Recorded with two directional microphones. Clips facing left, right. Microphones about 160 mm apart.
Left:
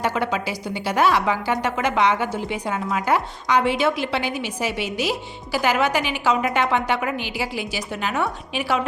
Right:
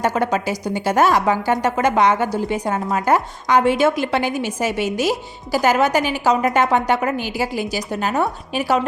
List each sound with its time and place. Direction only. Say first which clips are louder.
0.0 s a woman's voice: right 4 dB; 45° right (ahead or behind)